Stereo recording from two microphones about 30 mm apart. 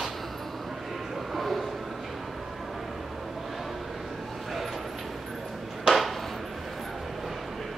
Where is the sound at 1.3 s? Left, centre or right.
Centre.